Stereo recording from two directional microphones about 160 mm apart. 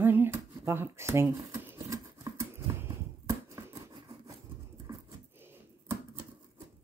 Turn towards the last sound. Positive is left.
turn(degrees=-15)  # may be behind; listen again after turning